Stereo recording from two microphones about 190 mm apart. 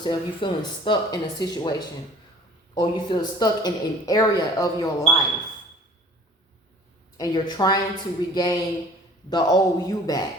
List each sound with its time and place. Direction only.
0.0 s speech: 25° left (ahead or behind)
2.7 s speech: 25° left (ahead or behind)
7.2 s speech: 20° left (ahead or behind)